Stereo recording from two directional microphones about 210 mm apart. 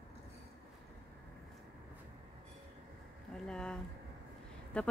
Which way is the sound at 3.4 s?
5° left (ahead or behind).